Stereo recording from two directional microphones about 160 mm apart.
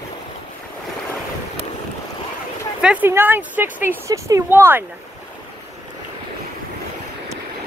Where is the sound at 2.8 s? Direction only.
10° right (ahead or behind).